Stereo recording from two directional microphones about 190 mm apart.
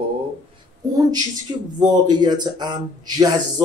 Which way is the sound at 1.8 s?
20° right (ahead or behind).